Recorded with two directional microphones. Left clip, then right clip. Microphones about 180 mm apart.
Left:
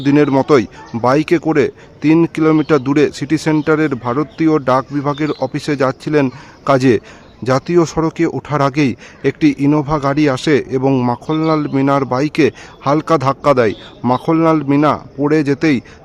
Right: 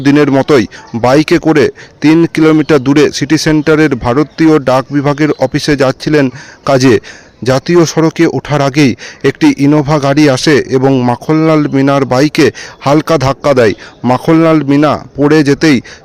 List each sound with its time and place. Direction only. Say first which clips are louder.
0.0 s speech: right 4 dB; 25° right (ahead or behind)